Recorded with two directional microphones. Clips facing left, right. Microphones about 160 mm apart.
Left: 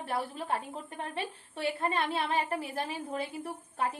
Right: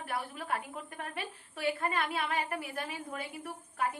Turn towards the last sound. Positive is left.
turn(degrees=30)  # may be behind; listen again after turning